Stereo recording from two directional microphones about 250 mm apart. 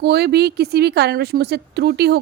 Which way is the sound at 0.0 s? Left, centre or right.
Right.